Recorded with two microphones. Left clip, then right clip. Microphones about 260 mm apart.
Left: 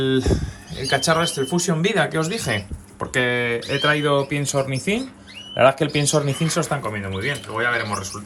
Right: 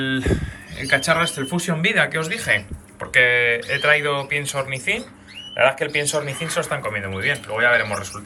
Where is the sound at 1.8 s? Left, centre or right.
Centre.